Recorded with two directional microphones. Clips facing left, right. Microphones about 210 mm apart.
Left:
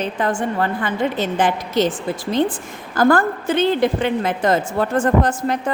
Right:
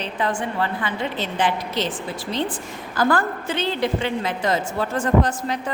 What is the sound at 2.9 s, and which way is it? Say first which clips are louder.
A woman's voice: left 5 dB; 45° left (ahead or behind).